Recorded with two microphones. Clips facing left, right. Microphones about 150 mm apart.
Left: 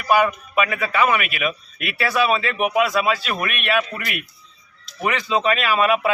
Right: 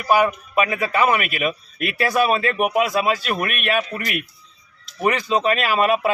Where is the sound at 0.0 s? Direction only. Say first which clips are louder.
Even; 35° right (ahead or behind).